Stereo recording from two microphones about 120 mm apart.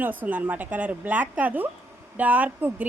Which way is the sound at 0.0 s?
15° right (ahead or behind).